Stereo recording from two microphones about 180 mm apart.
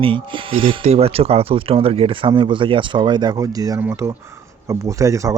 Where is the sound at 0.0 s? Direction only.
30° right (ahead or behind).